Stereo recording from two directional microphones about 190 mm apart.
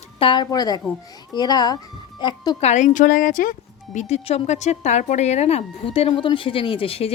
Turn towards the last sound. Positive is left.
turn(degrees=30)  # may be behind; listen again after turning